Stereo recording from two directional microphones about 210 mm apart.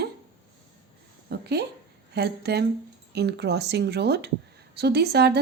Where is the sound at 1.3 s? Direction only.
50° right (ahead or behind).